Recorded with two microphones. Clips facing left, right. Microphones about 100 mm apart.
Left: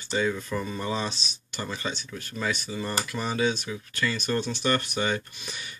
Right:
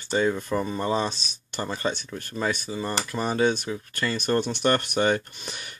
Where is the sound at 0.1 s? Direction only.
40° right (ahead or behind).